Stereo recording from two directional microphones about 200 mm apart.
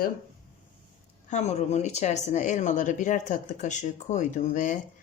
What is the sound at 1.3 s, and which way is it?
A woman's voice, 35° left (ahead or behind).